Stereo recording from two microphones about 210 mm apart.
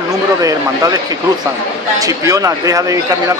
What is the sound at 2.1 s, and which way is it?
Speech, 15° right (ahead or behind).